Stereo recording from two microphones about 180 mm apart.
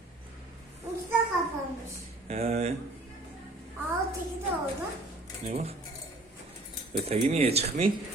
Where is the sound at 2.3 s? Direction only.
35° right (ahead or behind).